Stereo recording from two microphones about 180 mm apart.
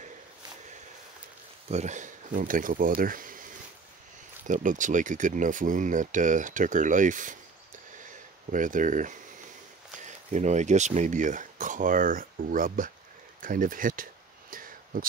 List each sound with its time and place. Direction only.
1.7 s speech: 40° right (ahead or behind)
4.5 s speech: 45° right (ahead or behind)
8.5 s speech: 45° right (ahead or behind)
14.5 s a sound: 50° right (ahead or behind)